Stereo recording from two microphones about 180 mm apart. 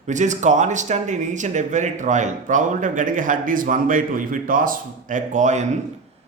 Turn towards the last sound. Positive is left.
turn(degrees=-40)  # may be behind; listen again after turning